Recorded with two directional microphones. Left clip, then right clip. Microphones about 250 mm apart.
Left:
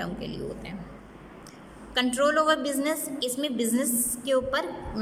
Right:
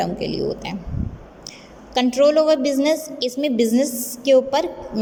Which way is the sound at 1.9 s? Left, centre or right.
Centre.